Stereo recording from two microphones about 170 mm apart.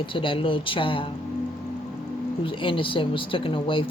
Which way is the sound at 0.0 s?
30° left (ahead or behind).